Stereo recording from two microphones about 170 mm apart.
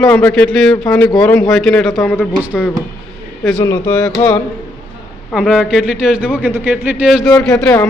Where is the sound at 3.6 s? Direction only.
15° left (ahead or behind).